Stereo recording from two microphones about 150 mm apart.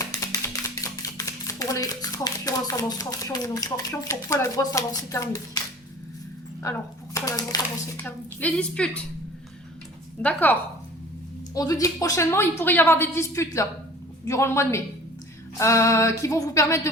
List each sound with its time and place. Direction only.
0.0 s a sound: 20° left (ahead or behind)
4.1 s a woman's voice: 20° left (ahead or behind)
6.6 s speech: 20° left (ahead or behind)
7.9 s a woman's voice: 10° left (ahead or behind)
10.2 s a woman's voice: 10° left (ahead or behind)
11.5 s a woman's voice: 25° left (ahead or behind)